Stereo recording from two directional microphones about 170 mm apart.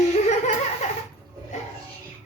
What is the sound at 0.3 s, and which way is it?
Laughter, 40° left (ahead or behind).